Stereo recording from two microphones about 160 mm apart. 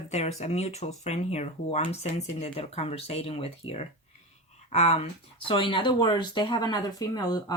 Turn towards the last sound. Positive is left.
turn(degrees=25)  # may be behind; listen again after turning